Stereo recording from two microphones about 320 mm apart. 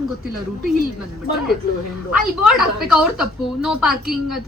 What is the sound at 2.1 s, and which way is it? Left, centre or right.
A woman's voice, centre.